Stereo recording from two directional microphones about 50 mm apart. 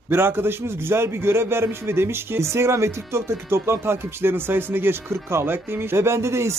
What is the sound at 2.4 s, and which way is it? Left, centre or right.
Speech, right.